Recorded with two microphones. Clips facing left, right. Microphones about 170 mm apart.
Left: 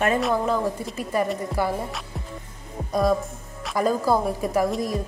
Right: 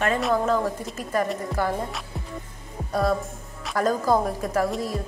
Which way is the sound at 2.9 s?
10° left (ahead or behind).